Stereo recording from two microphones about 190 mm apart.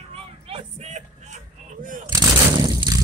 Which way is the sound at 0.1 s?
30° right (ahead or behind).